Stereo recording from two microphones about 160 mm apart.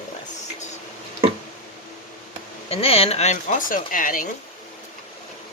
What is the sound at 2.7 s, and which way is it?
Speech, 40° left (ahead or behind).